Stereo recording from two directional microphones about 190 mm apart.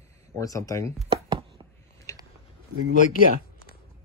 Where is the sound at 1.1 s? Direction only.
30° right (ahead or behind).